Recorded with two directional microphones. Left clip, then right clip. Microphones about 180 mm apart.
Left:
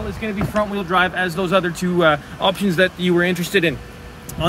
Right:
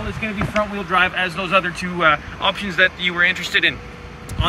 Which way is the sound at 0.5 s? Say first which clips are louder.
Even; 45° left (ahead or behind).